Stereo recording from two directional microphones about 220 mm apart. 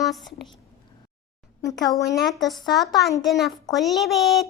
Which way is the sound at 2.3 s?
Centre (ahead or behind).